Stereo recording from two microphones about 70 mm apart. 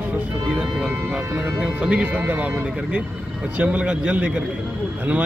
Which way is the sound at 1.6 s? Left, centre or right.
Centre.